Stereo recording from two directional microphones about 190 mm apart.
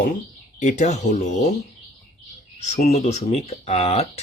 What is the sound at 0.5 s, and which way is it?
Speech, 40° left (ahead or behind).